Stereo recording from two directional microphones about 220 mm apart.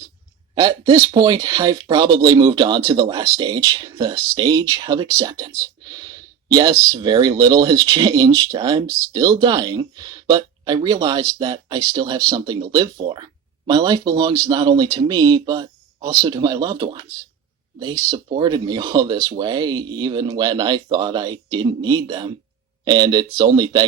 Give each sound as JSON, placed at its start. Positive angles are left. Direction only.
{"t": 0.6, "sound": "speech", "side_deg": -20}